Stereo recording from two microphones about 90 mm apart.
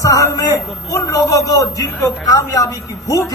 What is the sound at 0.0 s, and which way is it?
A man's voice, 40° left (ahead or behind).